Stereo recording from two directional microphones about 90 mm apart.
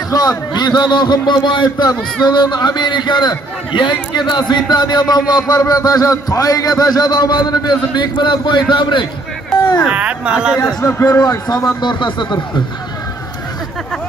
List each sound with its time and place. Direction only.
0.1 s a man's voice: 45° left (ahead or behind)
9.8 s speech: 15° right (ahead or behind)
10.6 s speech: 30° left (ahead or behind)
11.1 s speech: 45° left (ahead or behind)
11.8 s a man's voice: 60° left (ahead or behind)